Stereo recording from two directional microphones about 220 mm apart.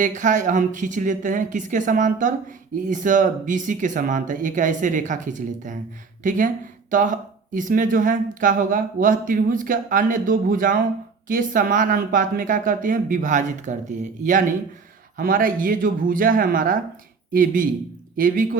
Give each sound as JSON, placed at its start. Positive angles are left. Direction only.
{"t": 0.0, "sound": "speech", "side_deg": -35}